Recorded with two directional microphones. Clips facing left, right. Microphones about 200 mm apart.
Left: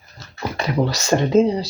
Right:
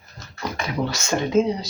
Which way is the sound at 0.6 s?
35° left (ahead or behind).